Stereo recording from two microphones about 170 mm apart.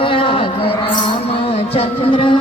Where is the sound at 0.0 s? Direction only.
30° left (ahead or behind).